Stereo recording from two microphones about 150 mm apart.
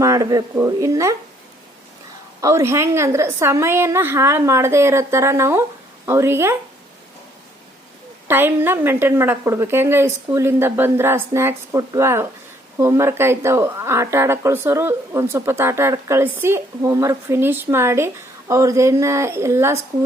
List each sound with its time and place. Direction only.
0.0 s speech: 20° right (ahead or behind)
2.4 s speech: 20° right (ahead or behind)
8.3 s speech: 15° right (ahead or behind)